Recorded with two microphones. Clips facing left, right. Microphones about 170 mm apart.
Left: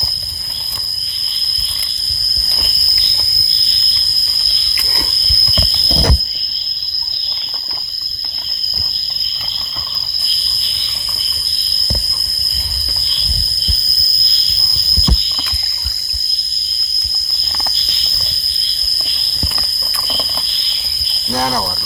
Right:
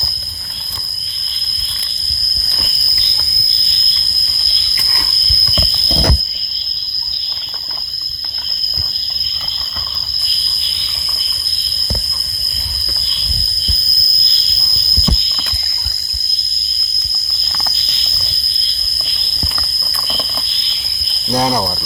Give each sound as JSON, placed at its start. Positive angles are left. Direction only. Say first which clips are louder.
{"t": 21.2, "sound": "speech", "louder": "right 3 dB", "side_deg": -20}